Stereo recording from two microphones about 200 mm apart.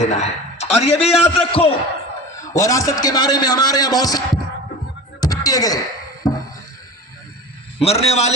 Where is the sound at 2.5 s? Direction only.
15° left (ahead or behind).